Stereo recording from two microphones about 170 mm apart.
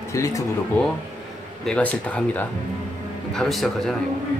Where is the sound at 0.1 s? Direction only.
20° left (ahead or behind).